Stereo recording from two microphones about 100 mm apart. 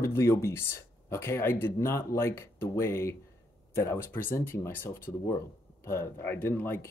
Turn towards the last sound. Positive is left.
turn(degrees=25)  # may be behind; listen again after turning